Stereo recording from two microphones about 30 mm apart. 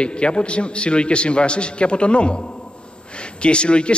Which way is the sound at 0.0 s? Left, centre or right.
Left.